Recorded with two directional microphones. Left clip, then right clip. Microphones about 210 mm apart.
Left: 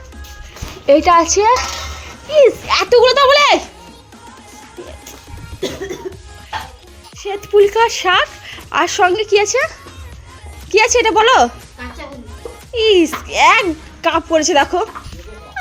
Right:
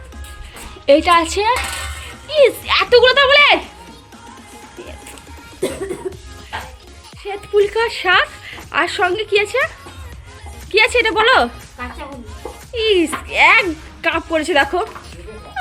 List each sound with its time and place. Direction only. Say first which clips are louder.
0.9 s speech: left 2 dB; 15° left (ahead or behind)
7.2 s speech: left 4 dB; 15° left (ahead or behind)
12.7 s speech: left 4 dB; 15° left (ahead or behind)